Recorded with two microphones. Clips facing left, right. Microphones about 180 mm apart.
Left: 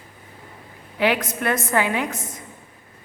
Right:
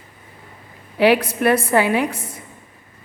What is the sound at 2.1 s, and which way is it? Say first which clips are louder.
Speech: even; 30° right (ahead or behind).